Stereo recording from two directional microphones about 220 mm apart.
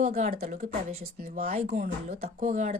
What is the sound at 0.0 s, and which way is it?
Speech, 30° right (ahead or behind).